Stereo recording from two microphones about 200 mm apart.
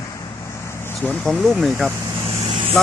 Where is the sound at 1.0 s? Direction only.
Centre (ahead or behind).